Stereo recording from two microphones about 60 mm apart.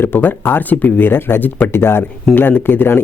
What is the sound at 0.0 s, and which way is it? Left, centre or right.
Speech, left.